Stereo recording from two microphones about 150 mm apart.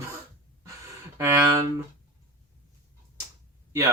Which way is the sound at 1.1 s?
15° right (ahead or behind).